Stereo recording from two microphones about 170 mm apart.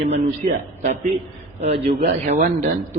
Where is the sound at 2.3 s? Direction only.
55° right (ahead or behind).